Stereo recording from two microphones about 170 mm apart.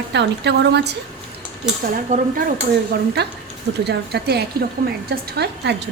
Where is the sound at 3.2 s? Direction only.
75° right (ahead or behind).